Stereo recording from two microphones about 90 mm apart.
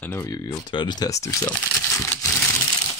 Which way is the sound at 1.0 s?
40° left (ahead or behind).